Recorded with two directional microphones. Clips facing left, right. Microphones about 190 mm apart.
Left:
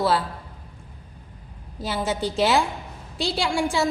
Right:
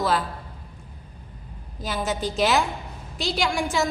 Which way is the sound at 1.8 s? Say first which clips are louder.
Left 1 dB; 30° left (ahead or behind).